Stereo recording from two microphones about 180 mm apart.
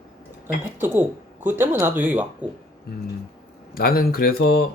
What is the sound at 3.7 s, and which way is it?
Speech, 55° left (ahead or behind).